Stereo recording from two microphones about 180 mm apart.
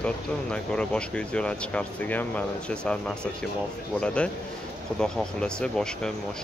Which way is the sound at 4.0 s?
5° left (ahead or behind).